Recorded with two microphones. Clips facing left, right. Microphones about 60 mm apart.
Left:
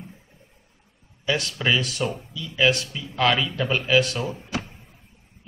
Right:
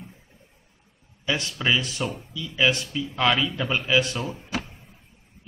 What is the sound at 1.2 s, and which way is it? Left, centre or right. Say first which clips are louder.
Speech: left 2 dB; centre.